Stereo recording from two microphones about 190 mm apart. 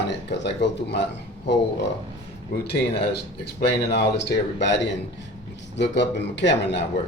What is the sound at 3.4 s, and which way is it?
Speech, 60° left (ahead or behind).